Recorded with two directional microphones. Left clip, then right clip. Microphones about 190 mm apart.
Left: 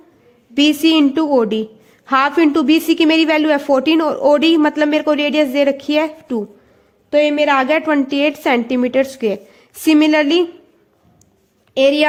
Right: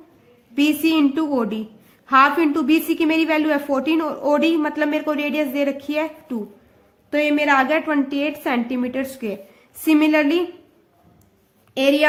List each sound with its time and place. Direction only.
0.5 s a woman's voice: 35° left (ahead or behind)
7.1 s a woman's voice: 20° left (ahead or behind)
11.7 s a woman's voice: 25° left (ahead or behind)